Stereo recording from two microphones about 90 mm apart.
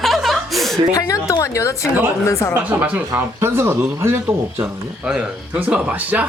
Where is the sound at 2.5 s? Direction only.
20° right (ahead or behind).